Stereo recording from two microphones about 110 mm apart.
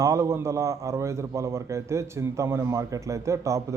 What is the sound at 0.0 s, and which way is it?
A man's voice, 25° right (ahead or behind).